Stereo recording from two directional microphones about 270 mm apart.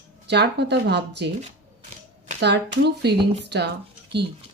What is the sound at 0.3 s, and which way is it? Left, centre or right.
Speech, right.